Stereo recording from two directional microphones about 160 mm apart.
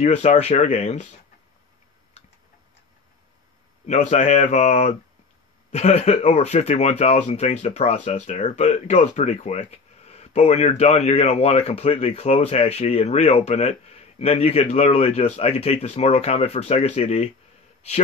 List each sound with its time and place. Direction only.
0.0 s speech: 45° left (ahead or behind)
3.8 s speech: 45° left (ahead or behind)